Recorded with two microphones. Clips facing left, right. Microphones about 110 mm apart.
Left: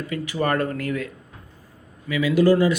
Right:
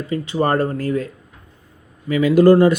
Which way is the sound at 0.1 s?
30° right (ahead or behind).